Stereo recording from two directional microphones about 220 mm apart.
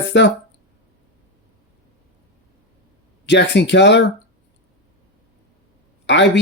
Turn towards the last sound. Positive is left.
turn(degrees=55)  # may be behind; listen again after turning